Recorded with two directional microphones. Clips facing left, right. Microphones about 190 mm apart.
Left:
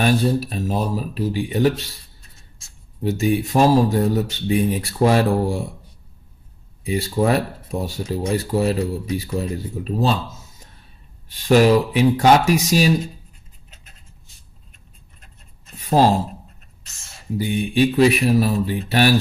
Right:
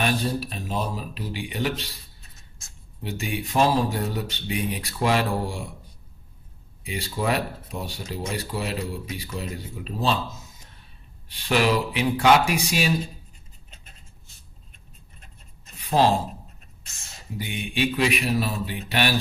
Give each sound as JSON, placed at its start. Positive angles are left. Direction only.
{"t": 0.0, "sound": "speech", "side_deg": 40}
{"t": 3.0, "sound": "speech", "side_deg": 40}
{"t": 6.8, "sound": "speech", "side_deg": 40}
{"t": 11.3, "sound": "speech", "side_deg": 40}
{"t": 15.8, "sound": "a sound", "side_deg": 40}
{"t": 17.4, "sound": "speech", "side_deg": 40}